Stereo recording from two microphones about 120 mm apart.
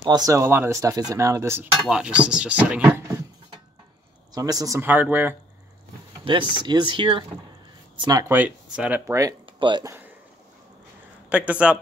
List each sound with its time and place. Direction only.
0.0 s speech: 35° right (ahead or behind)
1.9 s speech: 10° right (ahead or behind)
4.3 s speech: 30° right (ahead or behind)
4.8 s speech: 15° right (ahead or behind)
6.2 s speech: 40° right (ahead or behind)
8.0 s speech: 30° right (ahead or behind)
8.3 s speech: 15° right (ahead or behind)
9.0 s speech: 25° right (ahead or behind)
9.5 s speech: 40° right (ahead or behind)
11.2 s speech: 10° right (ahead or behind)